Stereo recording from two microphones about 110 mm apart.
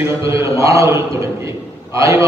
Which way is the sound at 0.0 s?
25° right (ahead or behind).